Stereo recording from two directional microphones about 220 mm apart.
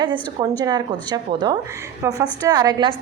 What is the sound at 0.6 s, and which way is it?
A woman's voice, 20° right (ahead or behind).